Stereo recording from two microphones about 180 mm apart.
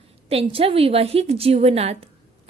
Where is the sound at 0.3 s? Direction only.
35° right (ahead or behind).